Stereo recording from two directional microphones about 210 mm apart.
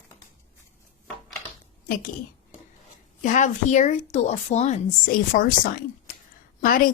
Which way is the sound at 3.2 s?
35° left (ahead or behind).